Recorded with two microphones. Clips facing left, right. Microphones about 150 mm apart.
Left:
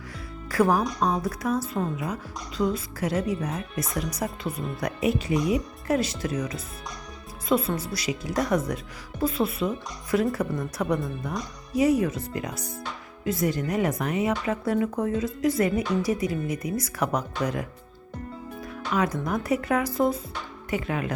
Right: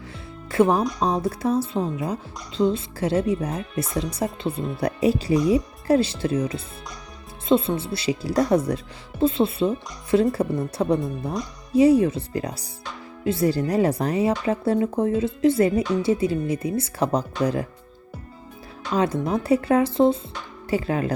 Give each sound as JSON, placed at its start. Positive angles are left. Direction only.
{"t": 0.4, "sound": "speech", "side_deg": -25}
{"t": 18.9, "sound": "speech", "side_deg": -30}